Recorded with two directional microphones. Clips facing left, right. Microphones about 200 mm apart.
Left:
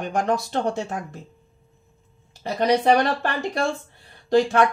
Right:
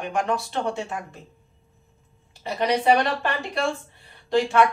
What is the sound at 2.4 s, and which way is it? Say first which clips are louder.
Speech: left 2 dB; 40° left (ahead or behind).